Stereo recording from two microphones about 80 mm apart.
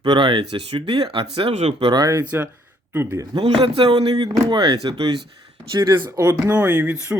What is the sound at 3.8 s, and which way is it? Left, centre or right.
Speech, right.